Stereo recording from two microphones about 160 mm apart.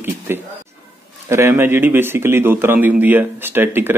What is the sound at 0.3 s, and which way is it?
A man's voice, 15° right (ahead or behind).